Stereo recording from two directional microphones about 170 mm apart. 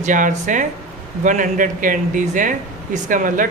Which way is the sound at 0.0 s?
50° right (ahead or behind).